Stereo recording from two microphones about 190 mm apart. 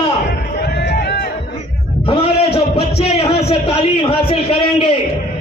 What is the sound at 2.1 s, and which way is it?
A man's voice, 30° left (ahead or behind).